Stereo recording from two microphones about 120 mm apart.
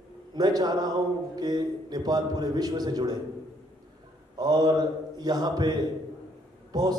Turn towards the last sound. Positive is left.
turn(degrees=-35)  # may be behind; listen again after turning